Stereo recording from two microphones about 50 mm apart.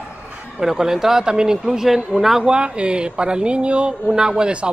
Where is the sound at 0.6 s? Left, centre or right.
Centre.